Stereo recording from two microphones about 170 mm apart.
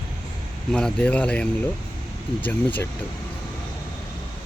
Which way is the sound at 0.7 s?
5° left (ahead or behind).